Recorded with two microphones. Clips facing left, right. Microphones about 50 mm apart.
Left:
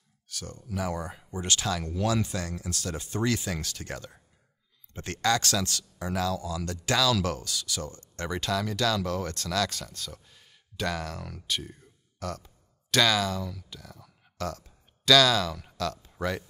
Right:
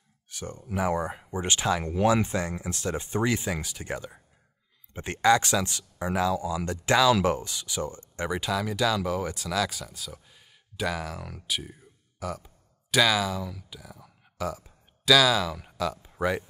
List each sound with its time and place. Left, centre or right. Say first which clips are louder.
0.3 s speech: right 3 dB; right